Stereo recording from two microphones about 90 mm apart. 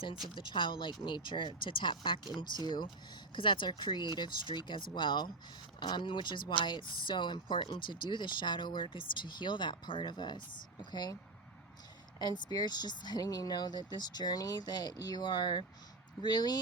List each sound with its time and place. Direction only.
0.3 s speech: 65° left (ahead or behind)
2.6 s speech: 55° left (ahead or behind)
3.3 s speech: 65° left (ahead or behind); by 11.2 s 50° left (ahead or behind)
12.2 s speech: 50° left (ahead or behind)